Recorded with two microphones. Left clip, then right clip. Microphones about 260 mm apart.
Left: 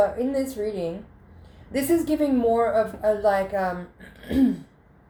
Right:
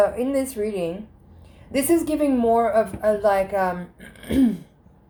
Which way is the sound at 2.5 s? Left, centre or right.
Right.